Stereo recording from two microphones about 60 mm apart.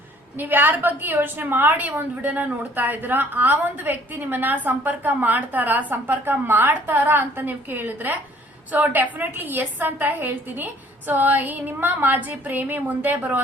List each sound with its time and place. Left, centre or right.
0.3 s a woman's voice: right